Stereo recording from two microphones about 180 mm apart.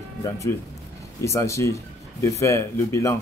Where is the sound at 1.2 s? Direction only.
15° left (ahead or behind).